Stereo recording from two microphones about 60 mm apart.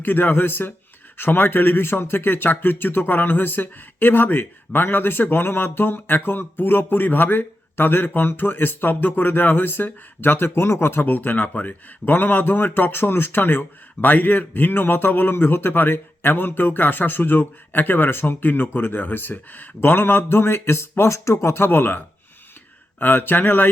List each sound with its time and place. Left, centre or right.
0.0 s speech: left